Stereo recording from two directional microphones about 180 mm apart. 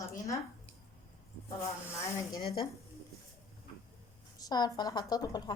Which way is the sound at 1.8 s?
15° left (ahead or behind).